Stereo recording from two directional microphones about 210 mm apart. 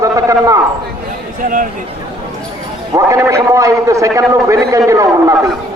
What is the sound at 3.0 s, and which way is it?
A man's voice, 15° right (ahead or behind).